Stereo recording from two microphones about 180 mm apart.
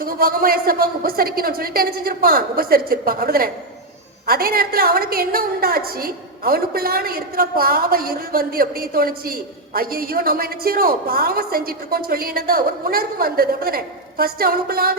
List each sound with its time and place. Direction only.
0.0 s a woman's voice: 55° right (ahead or behind)